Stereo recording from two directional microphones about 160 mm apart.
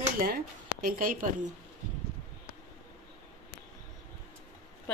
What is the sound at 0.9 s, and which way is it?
Speech, 60° right (ahead or behind).